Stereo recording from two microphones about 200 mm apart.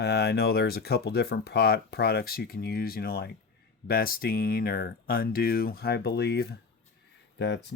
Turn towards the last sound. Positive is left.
turn(degrees=60)  # may be behind; listen again after turning